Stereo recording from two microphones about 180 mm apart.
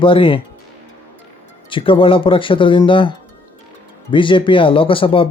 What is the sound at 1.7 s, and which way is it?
Speech, 30° left (ahead or behind).